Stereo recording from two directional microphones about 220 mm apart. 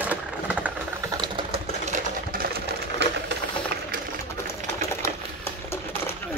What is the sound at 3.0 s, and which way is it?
Sewing machine, 50° right (ahead or behind).